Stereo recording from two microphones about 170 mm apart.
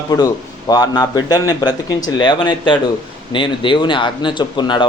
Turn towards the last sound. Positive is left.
turn(degrees=25)  # may be behind; listen again after turning